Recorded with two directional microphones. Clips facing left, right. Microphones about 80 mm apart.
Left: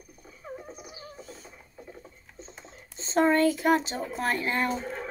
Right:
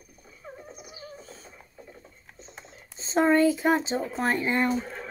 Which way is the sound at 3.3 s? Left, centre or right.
Right.